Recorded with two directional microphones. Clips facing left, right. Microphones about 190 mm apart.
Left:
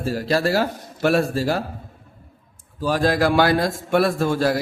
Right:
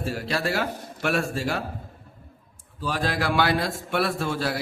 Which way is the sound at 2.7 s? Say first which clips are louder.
Left 7 dB; 40° left (ahead or behind).